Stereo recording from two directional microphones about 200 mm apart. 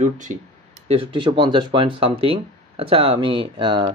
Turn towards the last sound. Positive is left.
turn(degrees=-25)  # may be behind; listen again after turning